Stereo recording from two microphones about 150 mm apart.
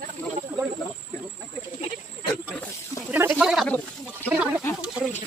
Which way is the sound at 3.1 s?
15° right (ahead or behind).